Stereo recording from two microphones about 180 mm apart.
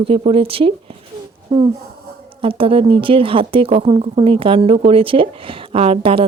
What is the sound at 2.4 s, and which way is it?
Speech, 30° right (ahead or behind).